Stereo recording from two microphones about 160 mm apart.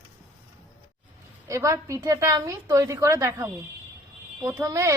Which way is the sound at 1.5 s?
20° right (ahead or behind).